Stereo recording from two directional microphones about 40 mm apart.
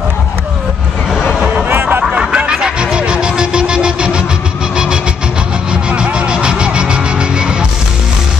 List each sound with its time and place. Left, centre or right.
1.7 s music: right
2.0 s a sound: right
2.5 s music: right
4.7 s vehicle: right
5.7 s music: right